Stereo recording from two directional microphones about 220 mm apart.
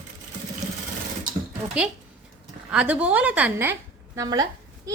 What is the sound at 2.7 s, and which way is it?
A woman's voice, 5° right (ahead or behind).